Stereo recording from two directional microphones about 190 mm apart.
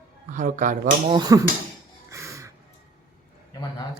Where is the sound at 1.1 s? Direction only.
20° right (ahead or behind).